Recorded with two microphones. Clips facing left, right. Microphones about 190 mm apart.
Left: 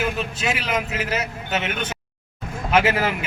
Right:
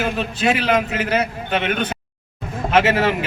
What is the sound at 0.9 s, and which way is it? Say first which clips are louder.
Speech: right 5 dB; 60° right (ahead or behind).